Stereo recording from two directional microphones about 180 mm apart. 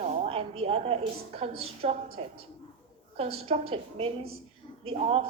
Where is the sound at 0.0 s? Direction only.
40° right (ahead or behind).